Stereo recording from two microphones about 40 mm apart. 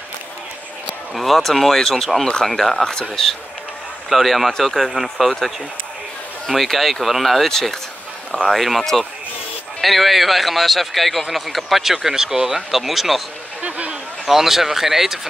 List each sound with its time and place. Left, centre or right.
1.1 s a man's voice: centre
4.1 s a man's voice: centre
13.6 s a sound: right
14.2 s speech: centre